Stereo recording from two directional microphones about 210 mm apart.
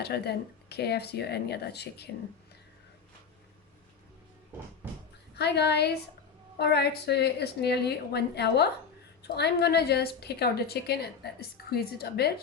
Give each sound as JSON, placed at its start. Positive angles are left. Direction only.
{"t": 0.0, "sound": "a woman's voice", "side_deg": 50}
{"t": 5.3, "sound": "a woman's voice", "side_deg": 50}